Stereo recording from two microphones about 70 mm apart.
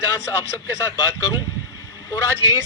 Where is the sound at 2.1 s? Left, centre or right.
Left.